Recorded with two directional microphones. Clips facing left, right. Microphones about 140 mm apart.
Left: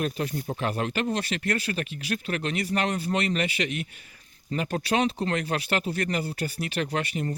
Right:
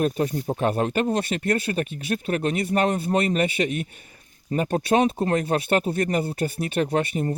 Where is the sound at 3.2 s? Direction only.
45° right (ahead or behind).